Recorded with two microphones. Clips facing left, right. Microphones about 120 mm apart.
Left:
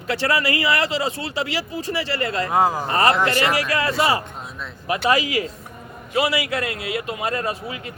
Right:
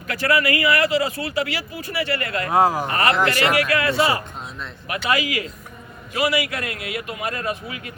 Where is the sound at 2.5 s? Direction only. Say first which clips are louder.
Right 3 dB; 5° right (ahead or behind).